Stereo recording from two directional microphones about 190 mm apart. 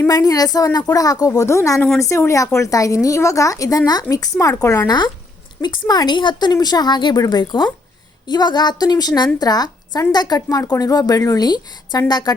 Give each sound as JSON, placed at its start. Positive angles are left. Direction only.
{"t": 0.0, "sound": "a woman's voice", "side_deg": 20}